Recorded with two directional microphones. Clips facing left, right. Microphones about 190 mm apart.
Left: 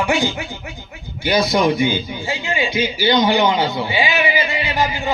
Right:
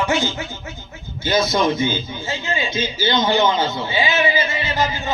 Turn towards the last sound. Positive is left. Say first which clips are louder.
# left 2 dB
turn(degrees=15)  # may be behind; listen again after turning